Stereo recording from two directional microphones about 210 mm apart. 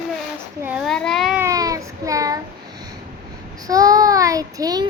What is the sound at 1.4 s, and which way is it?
A child's voice, 15° right (ahead or behind).